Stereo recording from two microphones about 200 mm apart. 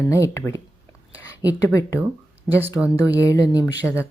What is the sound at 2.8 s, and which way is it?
Speech, 5° right (ahead or behind).